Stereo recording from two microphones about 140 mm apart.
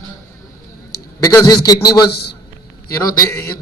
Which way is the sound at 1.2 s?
25° left (ahead or behind).